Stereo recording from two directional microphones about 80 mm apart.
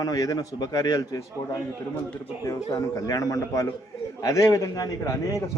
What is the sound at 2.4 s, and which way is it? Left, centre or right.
A man's voice, left.